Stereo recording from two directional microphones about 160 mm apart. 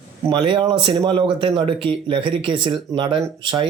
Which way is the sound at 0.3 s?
30° right (ahead or behind).